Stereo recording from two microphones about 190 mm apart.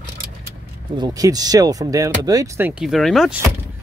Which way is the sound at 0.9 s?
20° right (ahead or behind).